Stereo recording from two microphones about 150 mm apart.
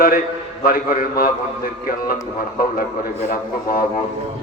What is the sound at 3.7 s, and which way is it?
Speech, 75° left (ahead or behind).